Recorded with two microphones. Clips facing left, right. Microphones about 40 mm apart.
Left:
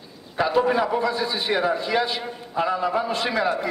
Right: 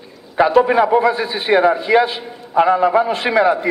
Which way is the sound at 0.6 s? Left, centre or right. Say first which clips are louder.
Right 8 dB; right.